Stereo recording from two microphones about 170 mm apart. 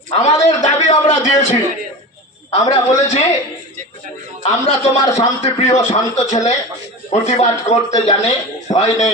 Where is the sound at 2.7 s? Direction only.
40° left (ahead or behind).